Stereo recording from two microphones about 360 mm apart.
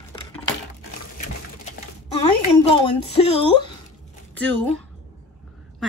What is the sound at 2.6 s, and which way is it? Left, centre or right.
Speech, centre.